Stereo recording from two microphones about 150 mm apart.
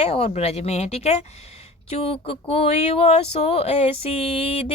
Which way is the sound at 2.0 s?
40° left (ahead or behind).